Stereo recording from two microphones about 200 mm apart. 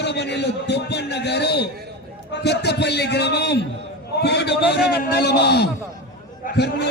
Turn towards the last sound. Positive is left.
turn(degrees=55)  # may be behind; listen again after turning